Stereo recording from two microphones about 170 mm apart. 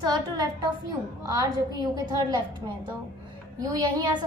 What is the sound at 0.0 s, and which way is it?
A child's voice, 25° right (ahead or behind).